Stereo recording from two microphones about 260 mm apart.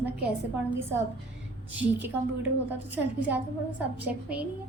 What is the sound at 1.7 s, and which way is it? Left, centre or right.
A woman's voice, centre.